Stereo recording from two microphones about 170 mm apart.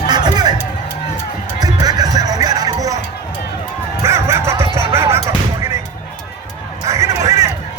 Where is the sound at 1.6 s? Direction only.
20° right (ahead or behind).